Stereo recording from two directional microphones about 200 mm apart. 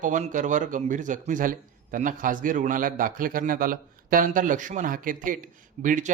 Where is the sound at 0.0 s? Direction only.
40° right (ahead or behind).